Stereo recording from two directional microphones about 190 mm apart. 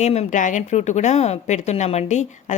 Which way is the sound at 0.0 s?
35° left (ahead or behind).